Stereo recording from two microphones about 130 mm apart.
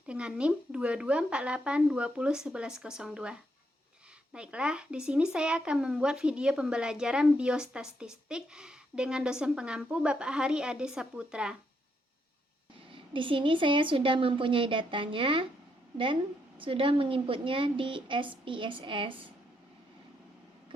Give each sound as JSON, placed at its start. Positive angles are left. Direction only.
{"t": 0.1, "sound": "speech", "side_deg": -5}
{"t": 12.9, "sound": "a woman's voice", "side_deg": -40}
{"t": 16.6, "sound": "a woman's voice", "side_deg": -45}